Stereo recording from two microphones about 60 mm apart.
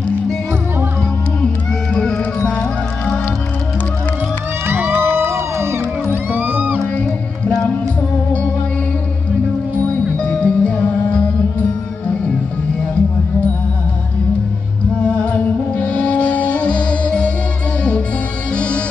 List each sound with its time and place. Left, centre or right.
2.0 s music: centre
4.6 s music: right
6.3 s music: right
7.0 s music: left
10.1 s music: centre
15.0 s music: centre
18.5 s music: centre